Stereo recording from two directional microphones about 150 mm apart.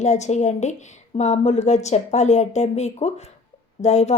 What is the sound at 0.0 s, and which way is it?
A woman's voice, 50° left (ahead or behind).